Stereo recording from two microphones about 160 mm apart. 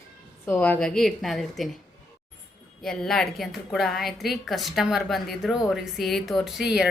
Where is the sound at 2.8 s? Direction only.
5° left (ahead or behind).